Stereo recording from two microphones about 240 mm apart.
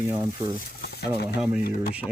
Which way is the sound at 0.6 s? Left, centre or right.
Left.